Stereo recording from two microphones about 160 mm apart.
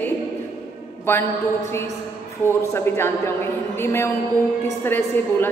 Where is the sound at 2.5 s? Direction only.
15° left (ahead or behind).